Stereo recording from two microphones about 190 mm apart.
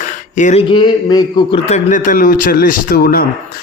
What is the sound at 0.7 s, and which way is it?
A man's voice, 25° left (ahead or behind).